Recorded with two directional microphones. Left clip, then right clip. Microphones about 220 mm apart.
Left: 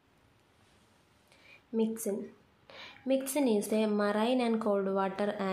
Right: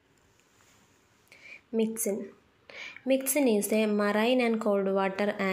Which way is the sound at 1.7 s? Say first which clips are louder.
Right 3 dB; 5° right (ahead or behind).